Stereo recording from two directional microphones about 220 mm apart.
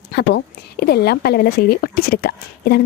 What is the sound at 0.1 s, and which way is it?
A woman's voice, 50° left (ahead or behind).